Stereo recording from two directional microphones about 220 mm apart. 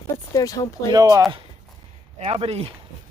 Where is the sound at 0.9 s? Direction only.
15° right (ahead or behind).